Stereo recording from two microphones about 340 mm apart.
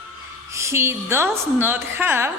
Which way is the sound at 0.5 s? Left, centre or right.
Centre.